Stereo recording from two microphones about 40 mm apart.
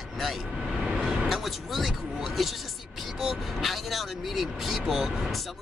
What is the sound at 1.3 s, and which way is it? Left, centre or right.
Speech, centre.